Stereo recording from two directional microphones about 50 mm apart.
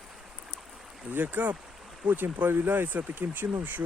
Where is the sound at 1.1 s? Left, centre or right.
Right.